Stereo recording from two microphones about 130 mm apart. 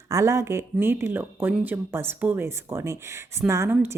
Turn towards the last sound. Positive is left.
turn(degrees=-20)  # may be behind; listen again after turning